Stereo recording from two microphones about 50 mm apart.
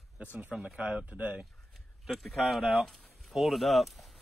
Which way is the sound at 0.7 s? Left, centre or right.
Right.